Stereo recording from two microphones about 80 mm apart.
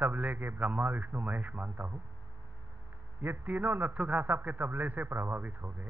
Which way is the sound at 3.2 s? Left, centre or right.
Right.